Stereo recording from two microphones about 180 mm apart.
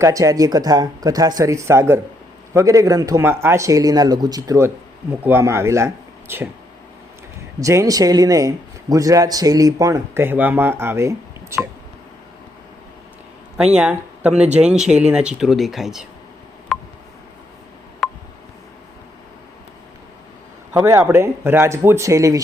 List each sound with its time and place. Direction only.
0.0 s a man's voice: 20° right (ahead or behind)
7.6 s a man's voice: 15° right (ahead or behind)
13.7 s speech: 5° right (ahead or behind)
16.7 s telephone dialing: centre (ahead or behind)
18.0 s telephone dialing: centre (ahead or behind)
20.7 s speech: 10° right (ahead or behind)